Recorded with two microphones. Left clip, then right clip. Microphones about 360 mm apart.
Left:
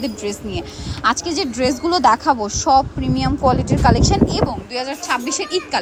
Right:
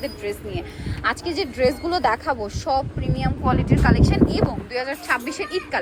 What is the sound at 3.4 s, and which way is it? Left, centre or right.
Speech, centre.